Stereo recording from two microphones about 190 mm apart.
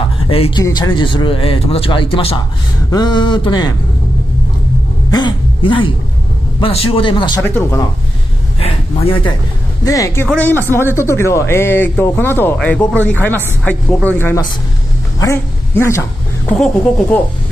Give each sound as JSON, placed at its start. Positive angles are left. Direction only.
{"t": 0.3, "sound": "speech", "side_deg": 30}
{"t": 5.1, "sound": "a sound", "side_deg": 25}
{"t": 6.6, "sound": "speech", "side_deg": 30}
{"t": 7.4, "sound": "a man's voice", "side_deg": 10}
{"t": 8.5, "sound": "speech", "side_deg": 30}
{"t": 9.8, "sound": "a man's voice", "side_deg": 15}
{"t": 15.1, "sound": "a sound", "side_deg": 15}